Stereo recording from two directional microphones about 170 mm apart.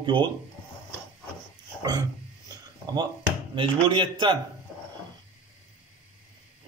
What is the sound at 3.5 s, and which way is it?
Speech, 30° right (ahead or behind).